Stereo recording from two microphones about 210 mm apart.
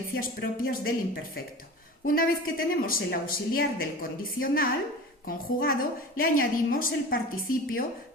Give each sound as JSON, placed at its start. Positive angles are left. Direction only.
{"t": 0.1, "sound": "speech", "side_deg": 45}